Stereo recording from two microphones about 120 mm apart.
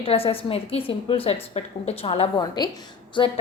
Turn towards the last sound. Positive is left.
turn(degrees=45)  # may be behind; listen again after turning